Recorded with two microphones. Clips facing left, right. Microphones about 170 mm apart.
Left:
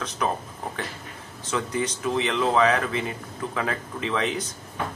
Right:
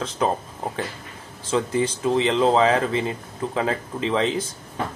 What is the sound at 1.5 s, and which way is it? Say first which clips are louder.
Speech: right 5 dB; 30° right (ahead or behind).